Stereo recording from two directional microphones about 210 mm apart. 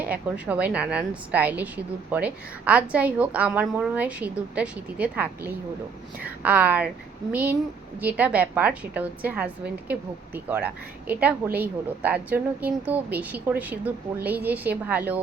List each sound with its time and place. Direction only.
0.0 s a woman's voice: 5° right (ahead or behind)
8.0 s a woman's voice: 5° right (ahead or behind)